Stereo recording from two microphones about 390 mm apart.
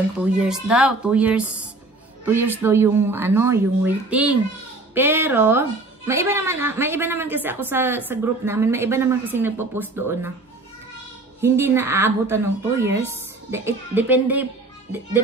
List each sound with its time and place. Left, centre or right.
0.2 s a woman's voice: centre
11.4 s a woman's voice: centre